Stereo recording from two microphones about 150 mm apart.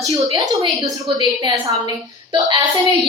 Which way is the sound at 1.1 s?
30° right (ahead or behind).